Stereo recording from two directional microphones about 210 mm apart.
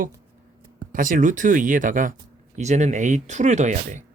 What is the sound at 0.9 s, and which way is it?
Speech, 40° right (ahead or behind).